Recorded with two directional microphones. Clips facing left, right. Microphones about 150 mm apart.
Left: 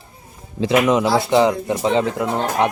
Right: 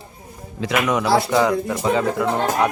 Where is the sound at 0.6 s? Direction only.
25° left (ahead or behind).